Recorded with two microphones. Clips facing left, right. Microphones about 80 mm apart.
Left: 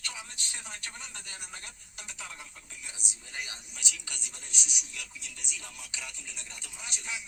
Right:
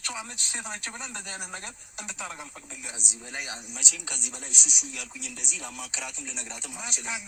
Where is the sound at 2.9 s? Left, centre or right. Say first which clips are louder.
Right 7 dB; right.